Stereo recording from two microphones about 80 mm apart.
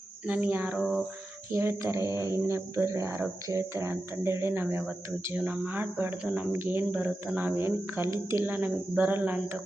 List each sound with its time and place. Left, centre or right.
0.3 s speech: right
1.5 s speech: right